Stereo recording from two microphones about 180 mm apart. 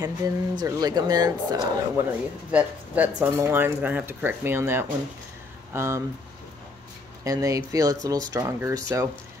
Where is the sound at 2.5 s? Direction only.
10° right (ahead or behind).